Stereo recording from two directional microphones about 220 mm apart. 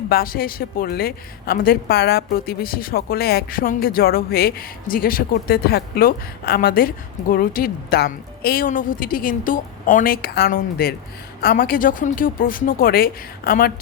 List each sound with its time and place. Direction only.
0.1 s a woman's voice: 40° left (ahead or behind)